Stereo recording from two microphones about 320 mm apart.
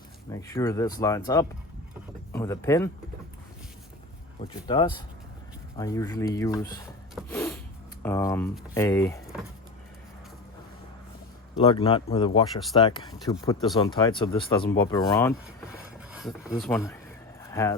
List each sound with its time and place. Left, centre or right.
0.3 s speech: centre
4.4 s speech: centre
7.2 s a sound: centre
8.0 s speech: centre
11.5 s speech: centre
12.5 s speech: centre
12.8 s speech: centre